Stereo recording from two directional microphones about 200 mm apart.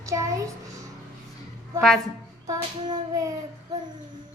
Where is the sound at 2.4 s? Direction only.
20° right (ahead or behind).